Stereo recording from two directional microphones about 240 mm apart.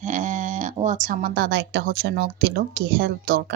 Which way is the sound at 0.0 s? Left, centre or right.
Right.